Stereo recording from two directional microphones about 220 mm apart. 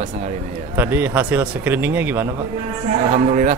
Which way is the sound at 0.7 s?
10° right (ahead or behind).